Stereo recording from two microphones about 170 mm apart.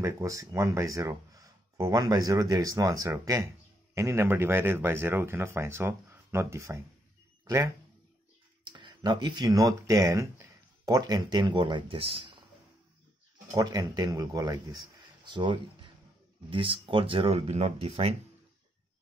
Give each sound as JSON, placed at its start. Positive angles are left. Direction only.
{"t": 0.0, "sound": "speech", "side_deg": -20}
{"t": 8.7, "sound": "speech", "side_deg": -25}
{"t": 13.5, "sound": "speech", "side_deg": -20}